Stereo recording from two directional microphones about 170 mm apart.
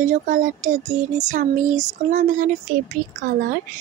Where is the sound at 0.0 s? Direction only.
45° right (ahead or behind).